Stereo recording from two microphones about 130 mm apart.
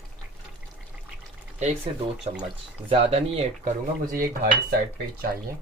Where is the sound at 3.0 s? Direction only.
55° right (ahead or behind).